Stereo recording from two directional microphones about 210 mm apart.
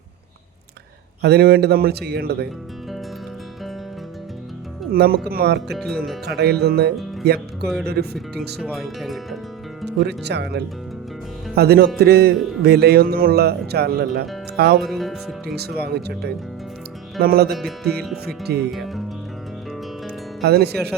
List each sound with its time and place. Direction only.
1.2 s speech: 50° right (ahead or behind)
4.9 s speech: 45° right (ahead or behind)
8.6 s speech: centre (ahead or behind)
10.1 s speech: 55° right (ahead or behind)
14.8 s speech: centre (ahead or behind)
15.5 s speech: 50° right (ahead or behind)
17.5 s speech: centre (ahead or behind)
18.3 s speech: 50° right (ahead or behind)
18.7 s speech: centre (ahead or behind)
20.4 s speech: 50° right (ahead or behind)